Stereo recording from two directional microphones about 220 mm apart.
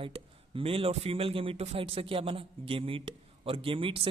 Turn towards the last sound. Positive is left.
turn(degrees=-25)  # may be behind; listen again after turning